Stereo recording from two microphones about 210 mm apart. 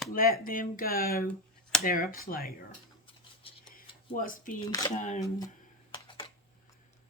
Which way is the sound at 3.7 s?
40° left (ahead or behind).